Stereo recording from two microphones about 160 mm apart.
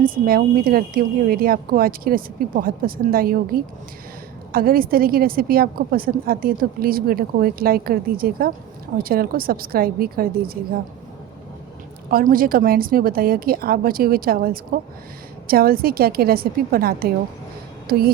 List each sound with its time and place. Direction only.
0.0 s a woman's voice: 65° right (ahead or behind)
12.1 s a woman's voice: 60° right (ahead or behind)